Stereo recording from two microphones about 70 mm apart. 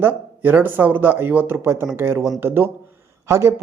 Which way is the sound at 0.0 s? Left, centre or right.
Right.